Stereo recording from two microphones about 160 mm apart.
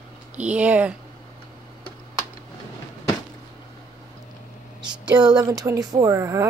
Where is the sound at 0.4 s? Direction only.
10° right (ahead or behind).